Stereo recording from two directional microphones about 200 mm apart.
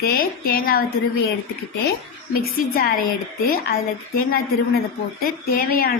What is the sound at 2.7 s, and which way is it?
Speech, 45° left (ahead or behind).